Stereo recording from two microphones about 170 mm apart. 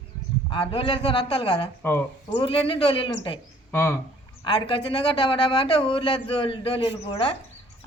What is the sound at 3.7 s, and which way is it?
Speech, 15° left (ahead or behind).